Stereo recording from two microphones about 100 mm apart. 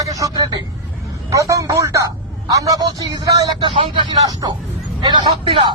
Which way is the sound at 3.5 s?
55° right (ahead or behind).